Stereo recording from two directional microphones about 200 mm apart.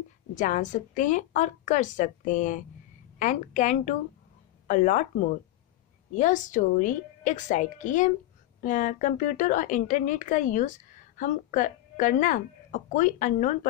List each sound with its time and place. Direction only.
0.3 s speech: 40° left (ahead or behind)
6.1 s speech: 40° left (ahead or behind)